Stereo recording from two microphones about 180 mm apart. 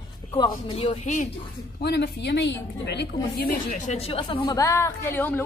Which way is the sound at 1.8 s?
65° left (ahead or behind).